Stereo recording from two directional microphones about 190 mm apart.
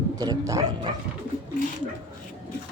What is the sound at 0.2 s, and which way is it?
Speech, 20° right (ahead or behind).